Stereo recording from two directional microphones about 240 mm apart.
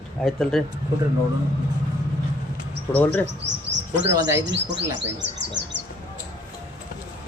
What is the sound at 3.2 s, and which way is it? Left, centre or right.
Bird, right.